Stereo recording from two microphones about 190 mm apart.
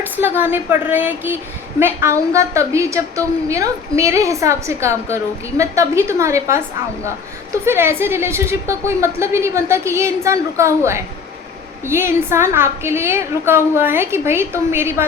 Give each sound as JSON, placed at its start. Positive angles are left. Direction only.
{"t": 0.0, "sound": "a woman's voice", "side_deg": -10}
{"t": 7.6, "sound": "a woman's voice", "side_deg": -15}